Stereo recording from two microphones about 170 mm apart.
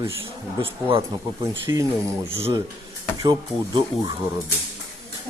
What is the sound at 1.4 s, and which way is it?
Speech, 15° right (ahead or behind).